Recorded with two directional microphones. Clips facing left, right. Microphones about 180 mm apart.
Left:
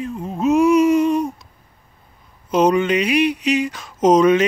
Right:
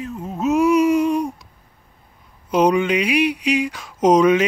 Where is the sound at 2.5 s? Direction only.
10° right (ahead or behind).